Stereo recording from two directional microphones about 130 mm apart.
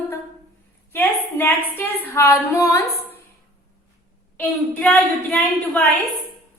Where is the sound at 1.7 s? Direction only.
20° left (ahead or behind).